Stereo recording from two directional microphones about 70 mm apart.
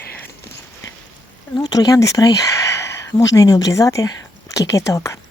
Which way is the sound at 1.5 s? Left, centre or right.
Left.